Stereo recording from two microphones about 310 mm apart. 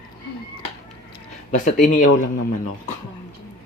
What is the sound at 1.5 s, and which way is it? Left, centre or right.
Speech, left.